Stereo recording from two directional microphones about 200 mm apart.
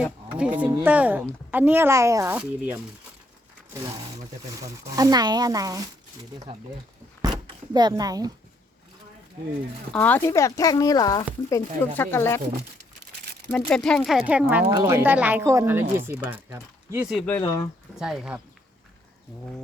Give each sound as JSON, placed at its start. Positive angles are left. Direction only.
{"t": 0.7, "sound": "speech", "side_deg": -10}
{"t": 4.5, "sound": "speech", "side_deg": -15}
{"t": 7.2, "sound": "a sound", "side_deg": -20}
{"t": 7.7, "sound": "speech", "side_deg": -20}
{"t": 9.9, "sound": "speech", "side_deg": 10}
{"t": 13.5, "sound": "speech", "side_deg": 5}
{"t": 14.7, "sound": "speech", "side_deg": -20}
{"t": 17.2, "sound": "speech", "side_deg": 10}
{"t": 17.9, "sound": "speech", "side_deg": 0}